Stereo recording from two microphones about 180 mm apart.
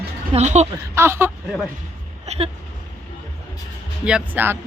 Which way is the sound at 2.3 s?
35° right (ahead or behind).